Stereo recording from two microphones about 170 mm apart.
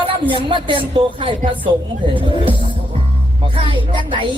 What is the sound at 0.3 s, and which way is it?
A woman's voice, 30° right (ahead or behind).